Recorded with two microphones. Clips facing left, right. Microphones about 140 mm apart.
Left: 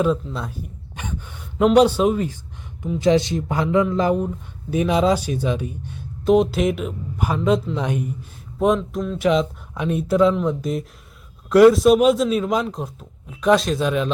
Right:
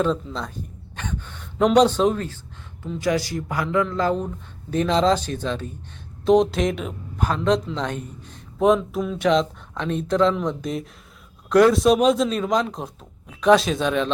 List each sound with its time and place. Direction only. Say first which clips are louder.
0.0 s a man's voice: left 2 dB; 10° left (ahead or behind)
8.5 s speech: right 1 dB; centre (ahead or behind)